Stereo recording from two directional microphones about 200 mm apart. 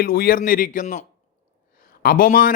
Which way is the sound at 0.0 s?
50° left (ahead or behind).